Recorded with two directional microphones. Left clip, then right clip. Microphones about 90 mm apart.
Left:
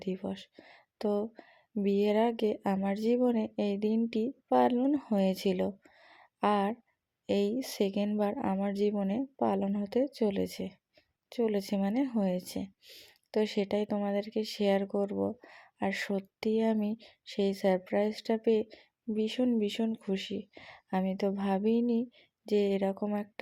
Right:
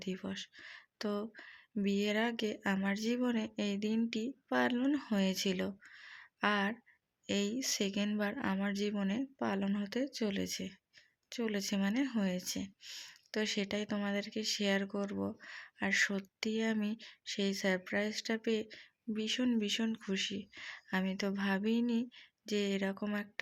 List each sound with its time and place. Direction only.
0.0 s speech: 50° left (ahead or behind)
12.8 s a sound: 30° left (ahead or behind)
13.3 s speech: 50° left (ahead or behind)